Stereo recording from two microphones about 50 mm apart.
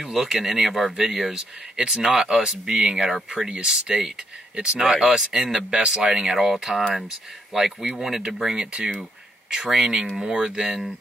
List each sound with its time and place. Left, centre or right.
0.0 s speech: centre